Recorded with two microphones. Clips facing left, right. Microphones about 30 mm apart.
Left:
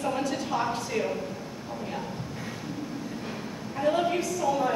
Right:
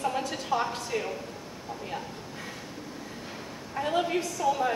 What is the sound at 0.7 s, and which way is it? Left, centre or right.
Speech, centre.